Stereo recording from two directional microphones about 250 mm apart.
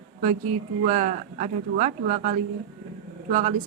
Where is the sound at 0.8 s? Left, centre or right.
Right.